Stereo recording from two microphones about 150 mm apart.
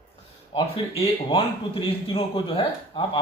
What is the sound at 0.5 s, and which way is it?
A man's voice, 40° left (ahead or behind).